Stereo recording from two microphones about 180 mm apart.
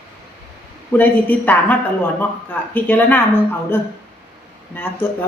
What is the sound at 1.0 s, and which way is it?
Speech, 10° left (ahead or behind).